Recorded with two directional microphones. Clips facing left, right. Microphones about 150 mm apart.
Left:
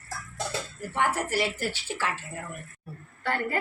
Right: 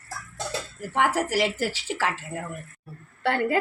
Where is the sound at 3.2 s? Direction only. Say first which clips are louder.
Right 6 dB; 85° right.